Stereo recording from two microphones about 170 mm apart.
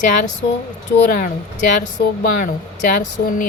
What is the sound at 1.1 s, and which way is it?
A woman's voice, 55° left (ahead or behind).